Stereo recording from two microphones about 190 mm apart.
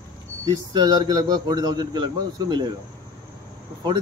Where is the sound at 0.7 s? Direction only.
20° right (ahead or behind).